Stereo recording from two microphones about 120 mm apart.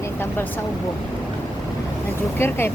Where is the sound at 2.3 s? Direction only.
20° left (ahead or behind).